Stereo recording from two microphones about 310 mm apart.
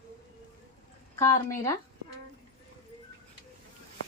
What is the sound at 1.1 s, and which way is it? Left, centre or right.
Speech, centre.